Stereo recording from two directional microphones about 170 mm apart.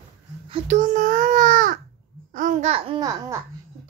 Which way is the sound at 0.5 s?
35° right (ahead or behind).